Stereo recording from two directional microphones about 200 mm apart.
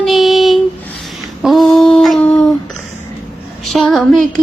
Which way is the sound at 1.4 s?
Centre (ahead or behind).